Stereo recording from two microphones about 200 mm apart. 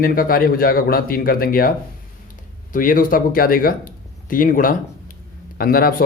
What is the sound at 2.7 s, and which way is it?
Speech, 45° left (ahead or behind).